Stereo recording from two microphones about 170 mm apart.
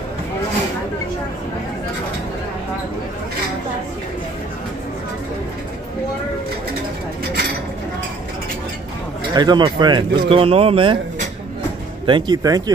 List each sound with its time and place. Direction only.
9.3 s speech: 25° right (ahead or behind)
12.1 s speech: 25° right (ahead or behind)